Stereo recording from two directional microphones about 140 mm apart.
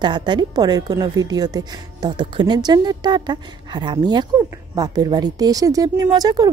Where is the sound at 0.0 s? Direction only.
30° right (ahead or behind).